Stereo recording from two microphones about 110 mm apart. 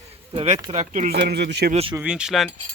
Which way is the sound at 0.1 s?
80° right.